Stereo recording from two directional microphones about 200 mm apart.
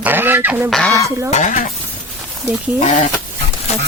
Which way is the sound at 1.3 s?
35° left (ahead or behind).